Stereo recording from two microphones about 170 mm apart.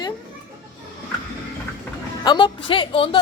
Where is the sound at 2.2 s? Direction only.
25° left (ahead or behind).